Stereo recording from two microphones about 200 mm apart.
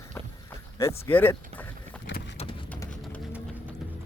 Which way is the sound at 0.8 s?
15° left (ahead or behind).